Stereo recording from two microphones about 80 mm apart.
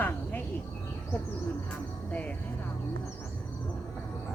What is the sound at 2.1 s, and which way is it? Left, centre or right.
Speech, centre.